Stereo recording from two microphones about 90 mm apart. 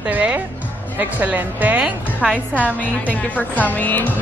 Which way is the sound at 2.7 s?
15° left (ahead or behind).